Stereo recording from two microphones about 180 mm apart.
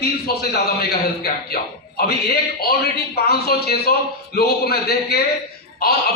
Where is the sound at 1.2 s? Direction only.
60° left (ahead or behind).